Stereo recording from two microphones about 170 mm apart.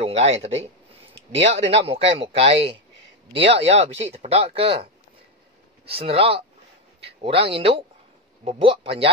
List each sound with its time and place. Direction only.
0.0 s speech: 35° right (ahead or behind)
5.9 s speech: 35° right (ahead or behind)